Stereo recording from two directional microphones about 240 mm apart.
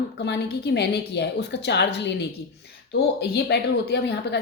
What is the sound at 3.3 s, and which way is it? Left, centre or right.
A woman's voice, left.